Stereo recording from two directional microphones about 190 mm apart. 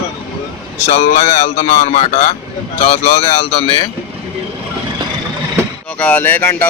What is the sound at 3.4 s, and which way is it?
Speech, 30° left (ahead or behind).